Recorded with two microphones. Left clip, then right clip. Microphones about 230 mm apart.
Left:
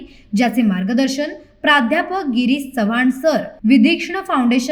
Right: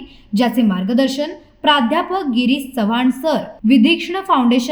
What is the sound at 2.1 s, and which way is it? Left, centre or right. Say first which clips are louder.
Speech: right 1 dB; left.